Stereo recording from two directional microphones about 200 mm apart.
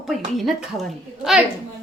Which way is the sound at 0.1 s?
Centre (ahead or behind).